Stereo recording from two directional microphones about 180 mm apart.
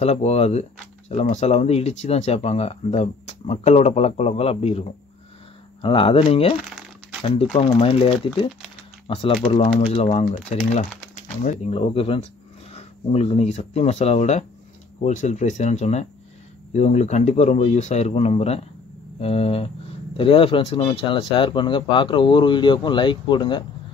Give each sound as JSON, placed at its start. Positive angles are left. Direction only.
{"t": 0.0, "sound": "speech", "side_deg": 35}
{"t": 7.5, "sound": "speech", "side_deg": 30}